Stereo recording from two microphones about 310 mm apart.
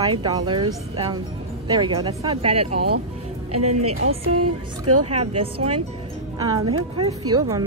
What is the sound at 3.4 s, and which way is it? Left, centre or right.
Speech, right.